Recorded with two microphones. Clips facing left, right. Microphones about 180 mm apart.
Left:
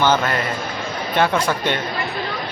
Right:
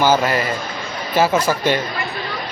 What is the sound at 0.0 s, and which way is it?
Speech, 5° right (ahead or behind).